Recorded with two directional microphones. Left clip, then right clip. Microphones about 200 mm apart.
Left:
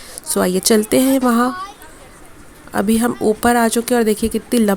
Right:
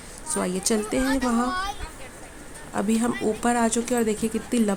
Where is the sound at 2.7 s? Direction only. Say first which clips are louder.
Left 8 dB; 30° left (ahead or behind).